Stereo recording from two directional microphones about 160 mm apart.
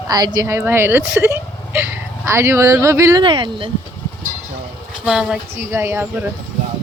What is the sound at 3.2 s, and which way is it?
Speech, 30° right (ahead or behind).